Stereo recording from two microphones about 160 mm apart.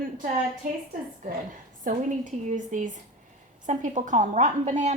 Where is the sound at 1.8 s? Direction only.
50° right (ahead or behind).